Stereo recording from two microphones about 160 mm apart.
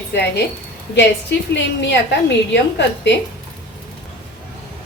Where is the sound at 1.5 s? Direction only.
90° left.